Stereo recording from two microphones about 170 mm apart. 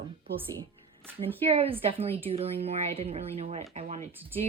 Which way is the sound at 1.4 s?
35° right (ahead or behind).